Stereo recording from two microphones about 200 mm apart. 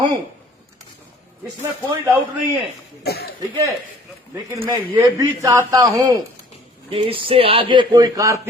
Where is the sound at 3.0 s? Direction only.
55° left (ahead or behind).